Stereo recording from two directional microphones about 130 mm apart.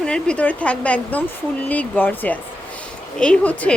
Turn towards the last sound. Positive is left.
turn(degrees=10)  # may be behind; listen again after turning